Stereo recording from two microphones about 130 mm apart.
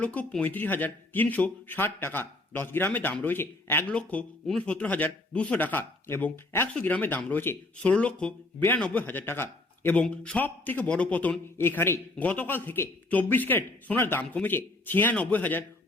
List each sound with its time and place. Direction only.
0.0 s speech: 10° left (ahead or behind)